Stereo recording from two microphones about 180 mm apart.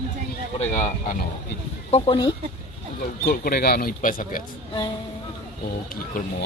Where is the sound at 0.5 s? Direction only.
45° left (ahead or behind).